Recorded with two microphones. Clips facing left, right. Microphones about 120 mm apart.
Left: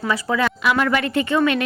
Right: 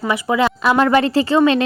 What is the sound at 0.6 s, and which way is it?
A woman's voice, 35° right (ahead or behind).